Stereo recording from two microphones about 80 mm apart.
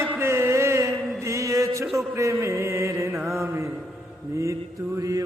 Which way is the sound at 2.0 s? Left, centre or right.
Right.